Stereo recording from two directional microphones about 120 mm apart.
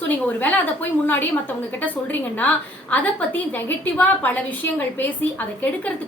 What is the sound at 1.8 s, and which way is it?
A woman's voice, 15° left (ahead or behind).